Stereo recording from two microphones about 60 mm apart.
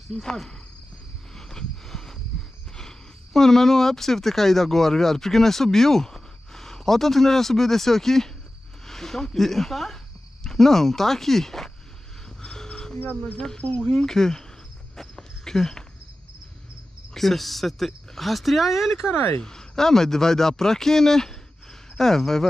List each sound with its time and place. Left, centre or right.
0.2 s speech: centre
1.3 s a sound: centre
3.3 s speech: centre
12.4 s music: centre
13.4 s speech: centre
13.8 s speech: centre
15.0 s walk: centre
17.1 s speech: centre
19.1 s speech: left
19.4 s speech: centre